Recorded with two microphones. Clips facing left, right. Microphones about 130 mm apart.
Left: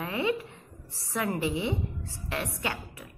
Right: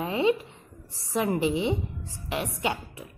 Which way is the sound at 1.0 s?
20° right (ahead or behind).